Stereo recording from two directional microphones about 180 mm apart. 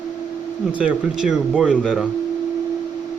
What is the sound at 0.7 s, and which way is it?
Speech, 5° right (ahead or behind).